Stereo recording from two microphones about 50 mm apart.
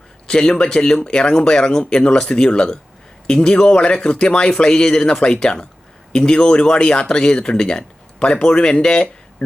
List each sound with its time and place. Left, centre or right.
0.3 s speech: centre